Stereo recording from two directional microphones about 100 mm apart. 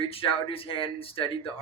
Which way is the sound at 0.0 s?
70° left (ahead or behind).